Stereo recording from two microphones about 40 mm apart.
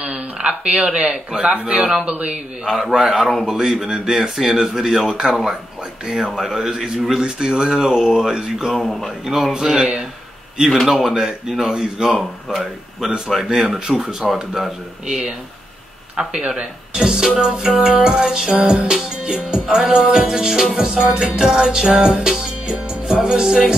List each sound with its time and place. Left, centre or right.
0.0 s a sound: right
1.4 s music: right
2.0 s speech: right
2.6 s music: centre
8.7 s speech: centre
9.2 s music: centre
10.9 s music: centre
14.3 s speech: centre
15.0 s music: right
18.6 s music: right
19.0 s music: centre